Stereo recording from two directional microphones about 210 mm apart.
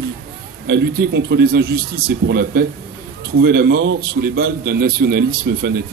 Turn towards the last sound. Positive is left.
turn(degrees=-45)  # may be behind; listen again after turning